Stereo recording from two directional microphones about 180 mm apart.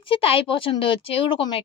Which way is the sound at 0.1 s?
30° left (ahead or behind).